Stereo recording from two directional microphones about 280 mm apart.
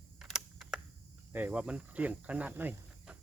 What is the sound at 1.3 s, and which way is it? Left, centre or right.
Speech, centre.